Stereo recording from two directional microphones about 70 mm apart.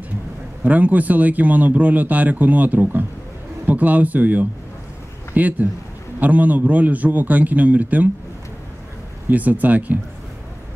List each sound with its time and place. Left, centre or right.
0.7 s speech: right
9.3 s speech: right